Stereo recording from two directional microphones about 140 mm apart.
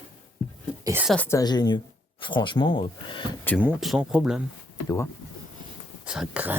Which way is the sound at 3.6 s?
10° right (ahead or behind).